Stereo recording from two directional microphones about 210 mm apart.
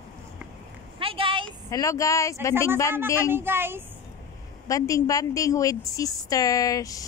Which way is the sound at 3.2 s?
10° right (ahead or behind).